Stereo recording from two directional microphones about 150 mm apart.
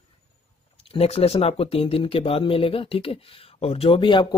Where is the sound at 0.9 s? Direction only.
40° left (ahead or behind).